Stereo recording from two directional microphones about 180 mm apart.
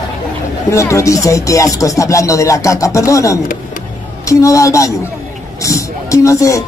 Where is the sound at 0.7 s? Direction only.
15° left (ahead or behind).